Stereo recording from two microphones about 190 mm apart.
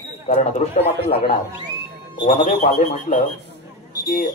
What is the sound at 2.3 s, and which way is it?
Speech, 30° left (ahead or behind).